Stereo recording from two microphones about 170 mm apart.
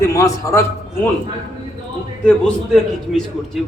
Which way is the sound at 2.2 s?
5° left (ahead or behind).